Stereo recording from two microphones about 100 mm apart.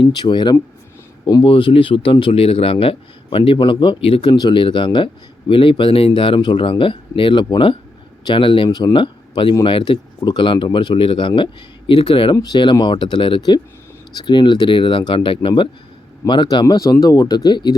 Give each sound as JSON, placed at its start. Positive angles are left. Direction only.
{"t": 0.0, "sound": "a man's voice", "side_deg": 50}
{"t": 10.2, "sound": "a man's voice", "side_deg": 50}
{"t": 12.4, "sound": "a man's voice", "side_deg": 50}